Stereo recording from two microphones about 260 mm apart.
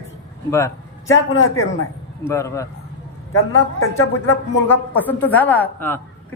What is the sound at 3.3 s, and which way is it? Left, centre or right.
Speech, left.